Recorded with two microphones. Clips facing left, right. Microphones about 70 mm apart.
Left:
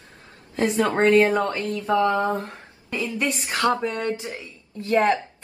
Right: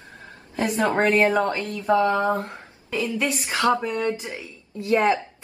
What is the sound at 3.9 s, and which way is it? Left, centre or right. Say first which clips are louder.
Speech: right 2 dB; left.